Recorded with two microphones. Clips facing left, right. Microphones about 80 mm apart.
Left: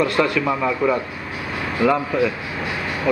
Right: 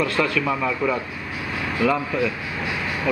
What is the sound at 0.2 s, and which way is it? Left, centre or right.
Speech, centre.